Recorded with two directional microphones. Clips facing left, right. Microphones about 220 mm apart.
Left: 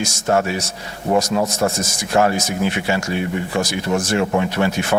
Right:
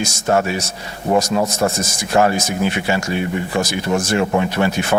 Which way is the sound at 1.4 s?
30° right (ahead or behind).